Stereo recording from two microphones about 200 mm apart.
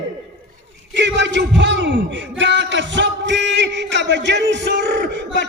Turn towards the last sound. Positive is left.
turn(degrees=-60)  # may be behind; listen again after turning